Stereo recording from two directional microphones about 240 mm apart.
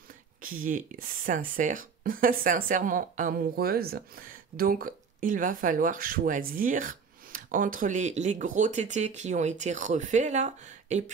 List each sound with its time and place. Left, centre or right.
0.4 s speech: right